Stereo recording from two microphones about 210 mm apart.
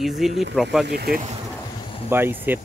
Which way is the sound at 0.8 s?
45° right (ahead or behind).